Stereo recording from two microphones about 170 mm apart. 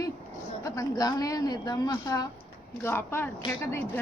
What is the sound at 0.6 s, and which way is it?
A woman's voice, 20° left (ahead or behind).